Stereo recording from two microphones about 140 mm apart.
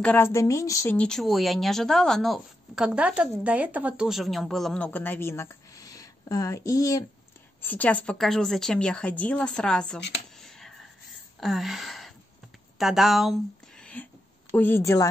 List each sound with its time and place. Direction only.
0.0 s speech: 15° left (ahead or behind)
0.9 s speech: 5° left (ahead or behind); by 7.1 s 25° left (ahead or behind)
7.6 s a woman's voice: 10° left (ahead or behind)
10.4 s a sound: centre (ahead or behind)
12.7 s a woman's voice: centre (ahead or behind); by 15.0 s 20° left (ahead or behind)